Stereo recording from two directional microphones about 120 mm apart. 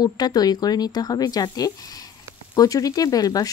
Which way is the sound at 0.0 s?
35° left (ahead or behind).